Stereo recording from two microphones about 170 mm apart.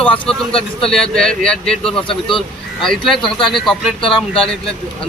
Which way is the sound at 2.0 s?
30° left (ahead or behind).